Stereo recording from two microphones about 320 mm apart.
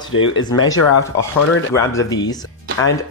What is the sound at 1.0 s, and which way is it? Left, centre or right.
Speech, centre.